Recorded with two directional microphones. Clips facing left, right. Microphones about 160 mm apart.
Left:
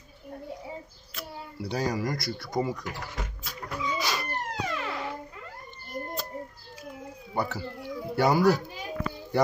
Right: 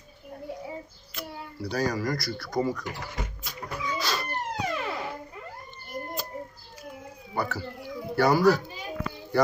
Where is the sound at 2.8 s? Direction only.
Centre (ahead or behind).